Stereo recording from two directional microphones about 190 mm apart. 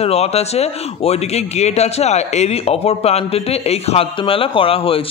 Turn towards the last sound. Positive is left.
turn(degrees=30)  # may be behind; listen again after turning